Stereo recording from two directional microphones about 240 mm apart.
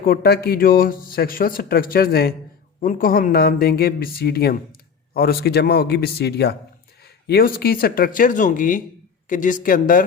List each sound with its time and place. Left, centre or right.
0.0 s speech: left